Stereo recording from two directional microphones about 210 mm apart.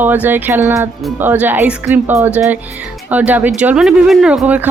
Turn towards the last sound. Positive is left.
turn(degrees=-5)  # may be behind; listen again after turning